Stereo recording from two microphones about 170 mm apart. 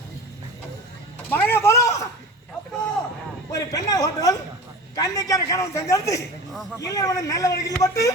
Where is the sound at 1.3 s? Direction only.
10° left (ahead or behind).